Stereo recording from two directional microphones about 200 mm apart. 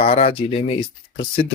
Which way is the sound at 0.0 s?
30° left (ahead or behind).